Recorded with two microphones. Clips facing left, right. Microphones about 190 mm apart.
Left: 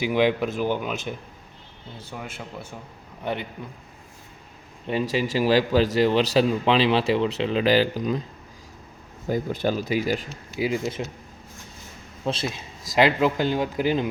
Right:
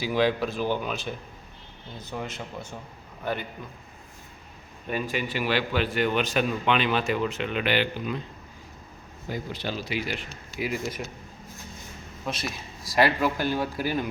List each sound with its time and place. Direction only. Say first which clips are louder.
0.0 s speech: left 3 dB; 15° left (ahead or behind)
5.1 s a man's voice: left 8 dB; 35° left (ahead or behind)
9.3 s speech: left 8 dB; 45° left (ahead or behind)
10.6 s speech: left 5 dB; 25° left (ahead or behind)
12.2 s speech: left 5 dB; 25° left (ahead or behind)